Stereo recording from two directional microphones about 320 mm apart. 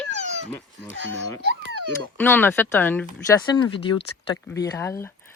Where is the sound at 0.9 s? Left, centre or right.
Right.